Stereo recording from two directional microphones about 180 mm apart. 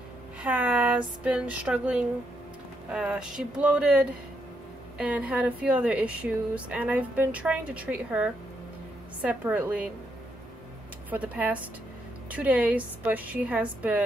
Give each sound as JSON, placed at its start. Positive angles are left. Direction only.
{"t": 0.4, "sound": "speech", "side_deg": -5}
{"t": 11.1, "sound": "speech", "side_deg": -10}